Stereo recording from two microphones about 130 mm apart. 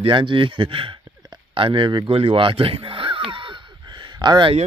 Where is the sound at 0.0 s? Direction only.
40° right (ahead or behind).